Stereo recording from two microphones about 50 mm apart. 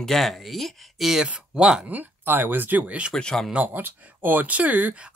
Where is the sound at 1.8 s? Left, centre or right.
Right.